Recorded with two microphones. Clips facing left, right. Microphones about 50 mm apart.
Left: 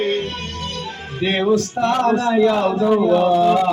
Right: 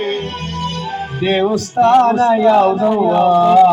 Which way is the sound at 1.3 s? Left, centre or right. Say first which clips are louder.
Right 2 dB; right.